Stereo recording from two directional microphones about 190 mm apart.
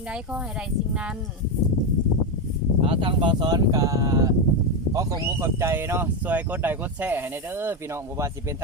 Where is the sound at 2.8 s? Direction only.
25° right (ahead or behind).